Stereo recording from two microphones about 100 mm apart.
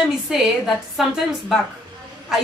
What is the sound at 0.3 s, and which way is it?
Speech, 5° right (ahead or behind).